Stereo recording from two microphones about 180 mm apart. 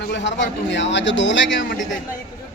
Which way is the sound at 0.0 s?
75° left (ahead or behind).